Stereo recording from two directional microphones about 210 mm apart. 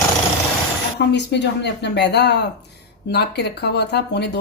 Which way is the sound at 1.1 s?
55° left (ahead or behind).